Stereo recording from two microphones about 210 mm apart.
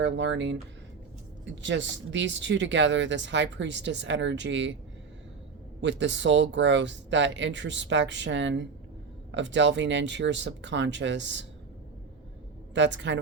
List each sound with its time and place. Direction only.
0.0 s speech: 60° right (ahead or behind)
5.8 s speech: 60° right (ahead or behind)
12.7 s speech: 60° right (ahead or behind)